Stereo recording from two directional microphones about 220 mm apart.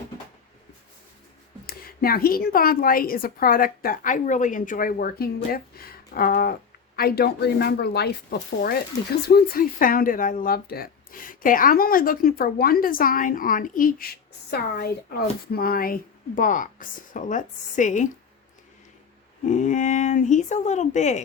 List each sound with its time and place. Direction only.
1.6 s a woman's voice: 45° left (ahead or behind)
19.5 s a woman's voice: 35° left (ahead or behind)